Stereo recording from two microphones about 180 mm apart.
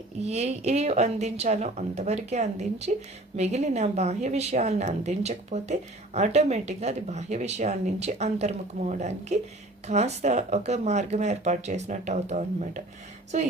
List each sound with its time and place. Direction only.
0.2 s a woman's voice: 40° right (ahead or behind)